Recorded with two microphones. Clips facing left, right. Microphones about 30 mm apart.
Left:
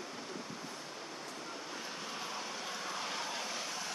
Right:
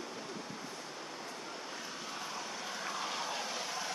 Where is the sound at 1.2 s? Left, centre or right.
Centre.